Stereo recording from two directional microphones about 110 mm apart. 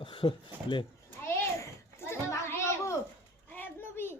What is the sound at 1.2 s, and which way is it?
Children playing, 20° left (ahead or behind).